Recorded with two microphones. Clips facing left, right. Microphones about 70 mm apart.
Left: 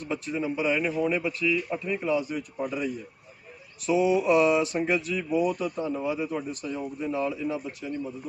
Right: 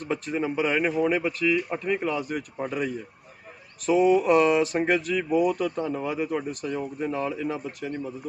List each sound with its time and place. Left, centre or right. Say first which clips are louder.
0.1 s speech: right 2 dB; right